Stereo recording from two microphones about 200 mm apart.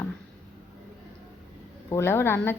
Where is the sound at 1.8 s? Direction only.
15° left (ahead or behind).